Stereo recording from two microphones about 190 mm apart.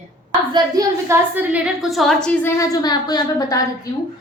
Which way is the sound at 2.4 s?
20° left (ahead or behind).